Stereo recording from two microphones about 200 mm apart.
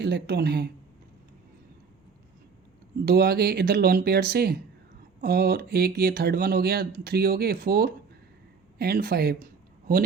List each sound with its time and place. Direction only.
0.0 s speech: 55° right (ahead or behind)
3.1 s speech: 50° right (ahead or behind)